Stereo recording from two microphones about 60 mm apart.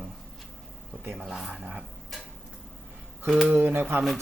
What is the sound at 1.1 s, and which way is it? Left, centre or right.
Speech, centre.